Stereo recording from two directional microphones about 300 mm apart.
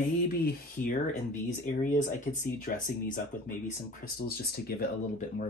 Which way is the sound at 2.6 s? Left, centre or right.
Left.